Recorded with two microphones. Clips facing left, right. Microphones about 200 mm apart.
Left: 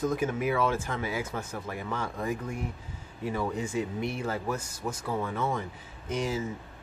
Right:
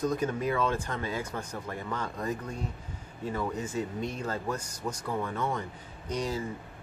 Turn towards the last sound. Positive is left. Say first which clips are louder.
# left 1 dB
turn(degrees=5)  # may be behind; listen again after turning